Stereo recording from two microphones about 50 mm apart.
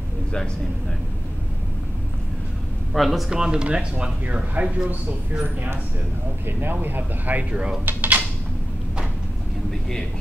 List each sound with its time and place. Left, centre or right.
2.9 s speech: centre
3.3 s speech: centre
6.4 s speech: right
9.7 s vehicle: centre